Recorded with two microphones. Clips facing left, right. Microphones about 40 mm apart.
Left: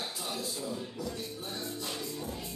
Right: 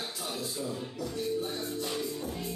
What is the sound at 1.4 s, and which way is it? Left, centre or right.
Music, centre.